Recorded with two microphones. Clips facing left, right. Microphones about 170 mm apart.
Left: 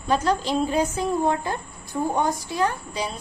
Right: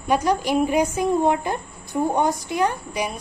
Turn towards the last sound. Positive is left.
turn(degrees=-15)  # may be behind; listen again after turning